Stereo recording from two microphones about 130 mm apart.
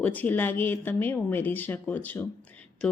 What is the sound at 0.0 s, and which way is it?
A woman's voice, 10° left (ahead or behind).